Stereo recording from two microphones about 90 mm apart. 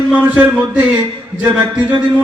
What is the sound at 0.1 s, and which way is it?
A man's voice, 15° right (ahead or behind).